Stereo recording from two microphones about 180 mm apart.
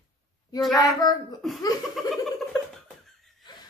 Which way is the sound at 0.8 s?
20° left (ahead or behind).